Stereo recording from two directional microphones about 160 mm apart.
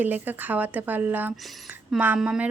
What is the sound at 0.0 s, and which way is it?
A woman's voice, 10° right (ahead or behind).